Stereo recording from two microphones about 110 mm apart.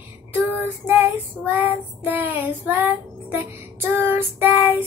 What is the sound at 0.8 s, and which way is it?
Child singing, 15° right (ahead or behind).